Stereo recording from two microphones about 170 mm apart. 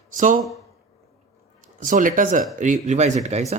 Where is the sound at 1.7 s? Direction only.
50° right (ahead or behind).